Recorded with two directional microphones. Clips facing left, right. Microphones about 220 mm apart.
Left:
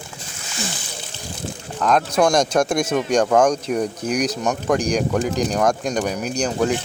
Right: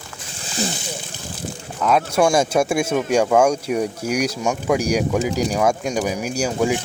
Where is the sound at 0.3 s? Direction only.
30° right (ahead or behind).